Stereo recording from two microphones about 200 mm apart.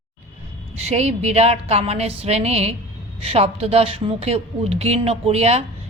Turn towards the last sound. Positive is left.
turn(degrees=-30)  # may be behind; listen again after turning